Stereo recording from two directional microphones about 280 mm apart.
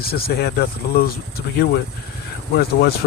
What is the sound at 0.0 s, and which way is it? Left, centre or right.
Speech, left.